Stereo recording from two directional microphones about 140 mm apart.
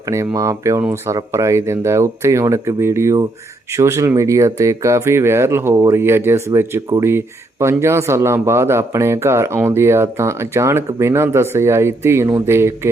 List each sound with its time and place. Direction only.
0.3 s speech: 20° right (ahead or behind)